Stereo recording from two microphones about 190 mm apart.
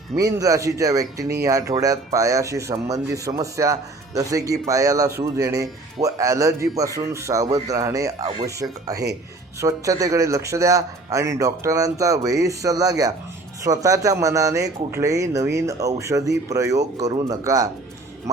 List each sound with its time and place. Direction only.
0.2 s a man's voice: 20° right (ahead or behind)